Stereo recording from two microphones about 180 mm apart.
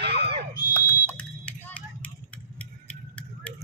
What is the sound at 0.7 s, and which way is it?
Vehicle, 10° left (ahead or behind).